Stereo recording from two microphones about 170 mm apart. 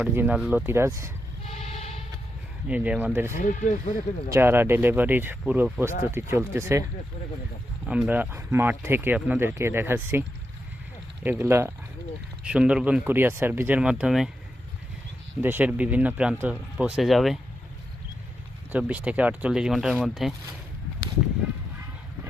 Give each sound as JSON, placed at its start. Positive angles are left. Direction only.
{"t": 0.0, "sound": "speech", "side_deg": -10}
{"t": 0.6, "sound": "speech", "side_deg": -15}
{"t": 1.5, "sound": "music", "side_deg": 40}
{"t": 2.6, "sound": "speech", "side_deg": -10}
{"t": 3.3, "sound": "speech", "side_deg": 50}
{"t": 4.3, "sound": "speech", "side_deg": -15}
{"t": 7.9, "sound": "speech", "side_deg": -10}
{"t": 15.4, "sound": "speech", "side_deg": -10}
{"t": 18.7, "sound": "speech", "side_deg": -5}